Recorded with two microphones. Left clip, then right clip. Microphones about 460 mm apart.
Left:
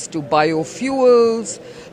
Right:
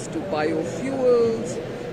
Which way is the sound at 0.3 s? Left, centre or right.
Left.